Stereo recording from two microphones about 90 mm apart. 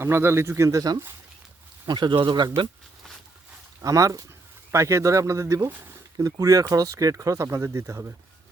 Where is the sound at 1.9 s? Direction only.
60° right (ahead or behind).